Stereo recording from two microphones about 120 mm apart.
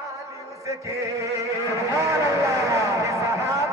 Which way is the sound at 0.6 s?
25° right (ahead or behind).